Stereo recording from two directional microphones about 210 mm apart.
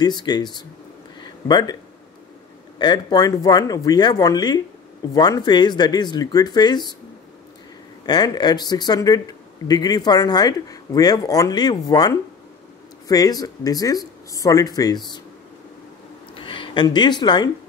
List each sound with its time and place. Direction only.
0.0 s speech: 20° left (ahead or behind)
1.2 s a sound: 20° left (ahead or behind)
2.8 s speech: 20° left (ahead or behind)
8.1 s speech: 20° left (ahead or behind)
16.3 s speech: 25° left (ahead or behind)